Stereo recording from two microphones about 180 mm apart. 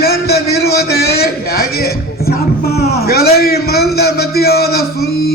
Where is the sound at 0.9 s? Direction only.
60° left (ahead or behind).